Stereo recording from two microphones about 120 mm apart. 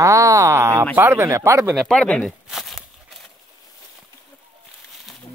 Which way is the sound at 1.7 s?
Centre (ahead or behind).